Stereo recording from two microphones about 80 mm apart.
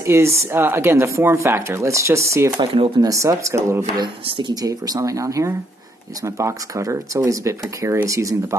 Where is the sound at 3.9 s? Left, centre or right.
Right.